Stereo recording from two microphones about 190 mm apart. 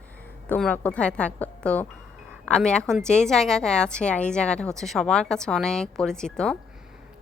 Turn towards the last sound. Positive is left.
turn(degrees=5)  # may be behind; listen again after turning